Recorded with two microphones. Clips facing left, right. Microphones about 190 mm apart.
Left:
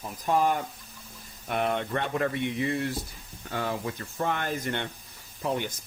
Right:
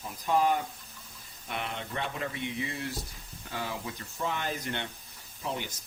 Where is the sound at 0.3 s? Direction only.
50° left (ahead or behind).